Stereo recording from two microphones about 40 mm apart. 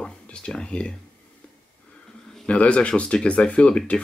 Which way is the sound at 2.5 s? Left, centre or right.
Left.